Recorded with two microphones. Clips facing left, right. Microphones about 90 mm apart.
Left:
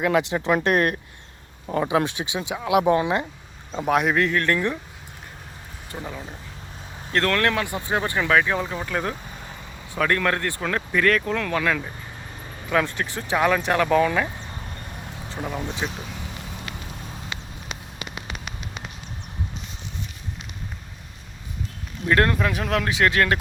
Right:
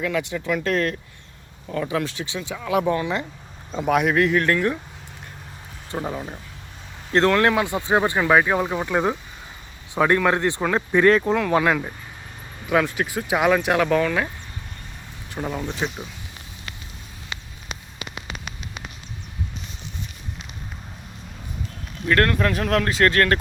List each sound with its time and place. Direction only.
0.3 s speech: 40° left (ahead or behind)
1.6 s speech: 25° left (ahead or behind)
2.0 s speech: 15° left (ahead or behind)
3.7 s speech: centre (ahead or behind)
5.9 s speech: 25° right (ahead or behind)
12.6 s speech: 5° right (ahead or behind)
15.4 s speech: centre (ahead or behind)
22.0 s speech: 20° left (ahead or behind)
22.4 s speech: 5° left (ahead or behind)